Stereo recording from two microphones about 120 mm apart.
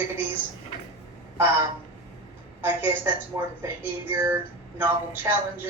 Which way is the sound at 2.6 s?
15° right (ahead or behind).